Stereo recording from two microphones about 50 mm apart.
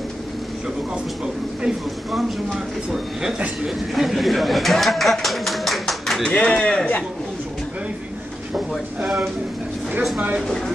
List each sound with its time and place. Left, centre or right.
2.1 s speech: centre
3.9 s chatter: centre
6.2 s speech: centre